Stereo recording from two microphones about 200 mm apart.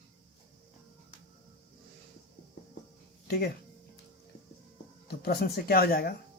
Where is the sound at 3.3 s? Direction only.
50° left (ahead or behind).